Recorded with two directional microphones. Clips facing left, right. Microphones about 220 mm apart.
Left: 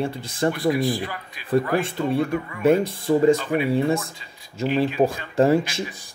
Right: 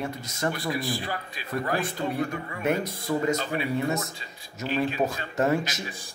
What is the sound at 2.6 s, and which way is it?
Speech, 30° left (ahead or behind).